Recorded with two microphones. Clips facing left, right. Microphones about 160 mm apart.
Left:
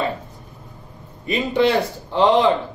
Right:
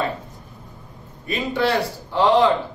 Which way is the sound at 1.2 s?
20° left (ahead or behind).